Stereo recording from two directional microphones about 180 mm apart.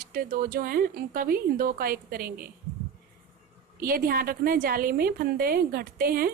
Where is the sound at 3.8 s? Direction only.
55° right (ahead or behind).